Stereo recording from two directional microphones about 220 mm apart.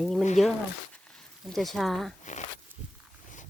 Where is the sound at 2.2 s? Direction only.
35° left (ahead or behind).